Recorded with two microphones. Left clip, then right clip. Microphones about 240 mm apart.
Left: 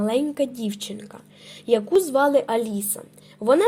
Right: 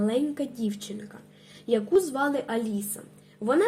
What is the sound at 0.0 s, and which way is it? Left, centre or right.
A woman's voice, left.